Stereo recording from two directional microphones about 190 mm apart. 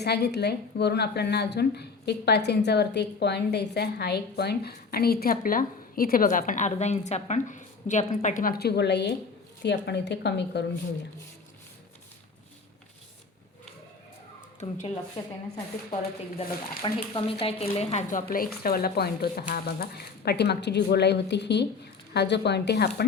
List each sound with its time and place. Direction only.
0.0 s a woman's voice: 60° left (ahead or behind)
15.1 s a woman's voice: 20° left (ahead or behind); by 23.0 s 60° left (ahead or behind)